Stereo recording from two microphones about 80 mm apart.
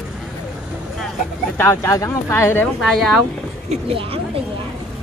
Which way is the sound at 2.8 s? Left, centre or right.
Centre.